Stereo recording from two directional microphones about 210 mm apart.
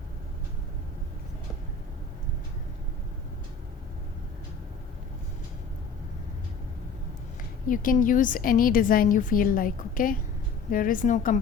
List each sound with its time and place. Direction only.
7.7 s a woman's voice: 40° left (ahead or behind)